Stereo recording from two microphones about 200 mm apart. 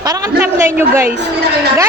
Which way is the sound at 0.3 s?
10° right (ahead or behind).